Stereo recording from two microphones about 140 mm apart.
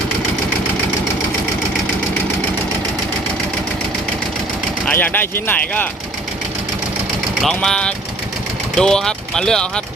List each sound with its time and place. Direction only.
4.9 s speech: 15° left (ahead or behind)
7.4 s speech: 5° left (ahead or behind)